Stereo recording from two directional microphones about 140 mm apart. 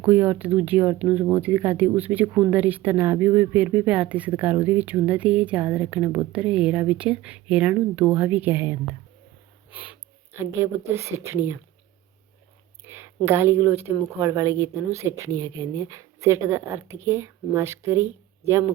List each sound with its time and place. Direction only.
0.0 s speech: 10° right (ahead or behind)
12.9 s speech: 15° right (ahead or behind)